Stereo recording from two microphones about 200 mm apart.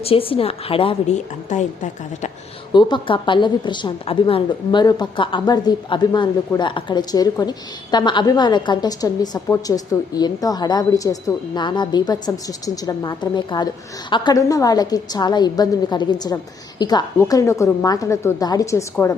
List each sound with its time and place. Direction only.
0.0 s a woman's voice: 30° left (ahead or behind)
2.7 s a woman's voice: 25° left (ahead or behind)